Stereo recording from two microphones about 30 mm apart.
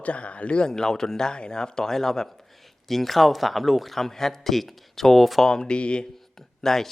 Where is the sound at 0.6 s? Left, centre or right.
Centre.